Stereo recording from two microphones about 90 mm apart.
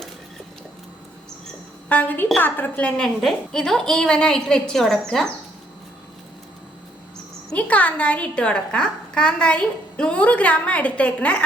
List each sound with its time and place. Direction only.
1.9 s a woman's voice: 20° left (ahead or behind)
3.0 s a woman's voice: 5° left (ahead or behind)
7.5 s a woman's voice: 15° left (ahead or behind)